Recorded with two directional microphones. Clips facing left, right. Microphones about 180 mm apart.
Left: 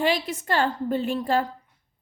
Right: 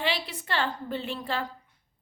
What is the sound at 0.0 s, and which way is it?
A woman's voice, 45° left (ahead or behind).